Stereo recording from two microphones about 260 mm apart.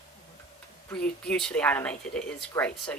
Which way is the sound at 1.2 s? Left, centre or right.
Centre.